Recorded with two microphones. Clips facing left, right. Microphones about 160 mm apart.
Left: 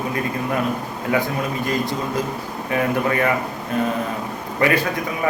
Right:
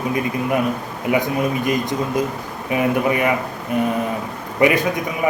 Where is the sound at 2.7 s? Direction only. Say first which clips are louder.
Right 2 dB; 15° right (ahead or behind).